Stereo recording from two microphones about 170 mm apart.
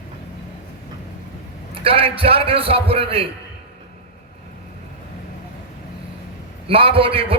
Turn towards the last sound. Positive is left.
turn(degrees=-35)  # may be behind; listen again after turning